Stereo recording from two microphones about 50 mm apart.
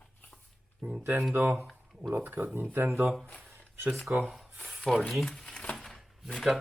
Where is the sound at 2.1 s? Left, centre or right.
Right.